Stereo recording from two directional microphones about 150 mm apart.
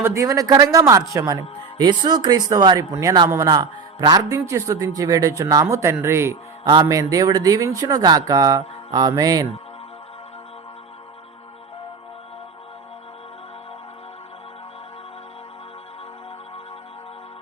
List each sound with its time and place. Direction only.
0.0 s speech: 20° right (ahead or behind)